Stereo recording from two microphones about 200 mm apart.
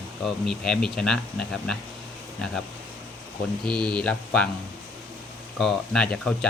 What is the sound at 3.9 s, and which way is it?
Speech, 5° left (ahead or behind).